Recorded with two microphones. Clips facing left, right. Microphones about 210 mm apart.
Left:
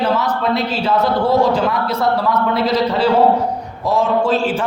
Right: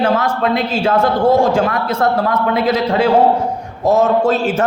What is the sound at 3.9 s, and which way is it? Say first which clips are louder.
Speech: right 3 dB; 45° right (ahead or behind).